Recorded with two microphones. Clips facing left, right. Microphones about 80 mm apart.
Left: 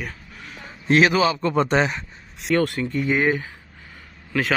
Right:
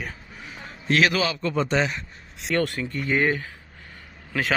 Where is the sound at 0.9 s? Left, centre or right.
Left.